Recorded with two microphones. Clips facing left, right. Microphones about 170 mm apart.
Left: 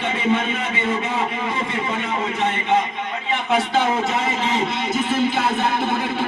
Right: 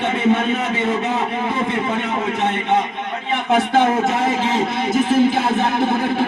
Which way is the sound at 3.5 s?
55° right (ahead or behind).